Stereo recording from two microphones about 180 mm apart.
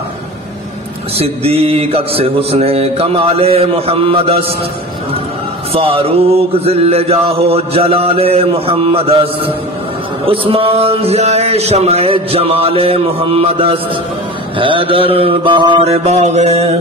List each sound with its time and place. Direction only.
1.1 s mantra: 35° right (ahead or behind)
5.7 s mantra: 30° right (ahead or behind)